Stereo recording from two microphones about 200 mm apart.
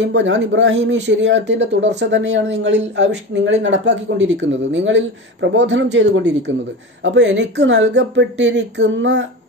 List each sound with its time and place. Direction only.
0.0 s speech: 65° right (ahead or behind)